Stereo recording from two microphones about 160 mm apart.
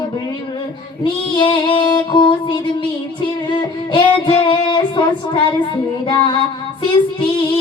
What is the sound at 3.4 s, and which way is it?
Music, 30° left (ahead or behind).